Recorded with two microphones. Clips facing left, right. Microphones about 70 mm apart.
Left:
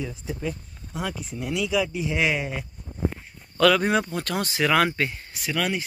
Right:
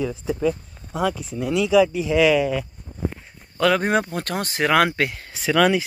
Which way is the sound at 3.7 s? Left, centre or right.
Right.